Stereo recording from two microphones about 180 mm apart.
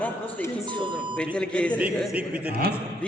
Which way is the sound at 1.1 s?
5° left (ahead or behind).